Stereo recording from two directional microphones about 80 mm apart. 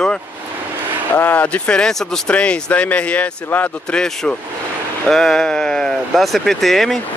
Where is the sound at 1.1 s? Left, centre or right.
Left.